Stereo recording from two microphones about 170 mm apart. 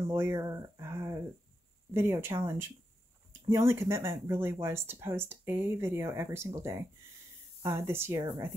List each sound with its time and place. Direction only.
0.0 s speech: 15° right (ahead or behind)
3.4 s speech: 15° right (ahead or behind)